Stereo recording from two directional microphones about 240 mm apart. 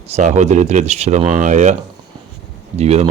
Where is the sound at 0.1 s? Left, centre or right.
Right.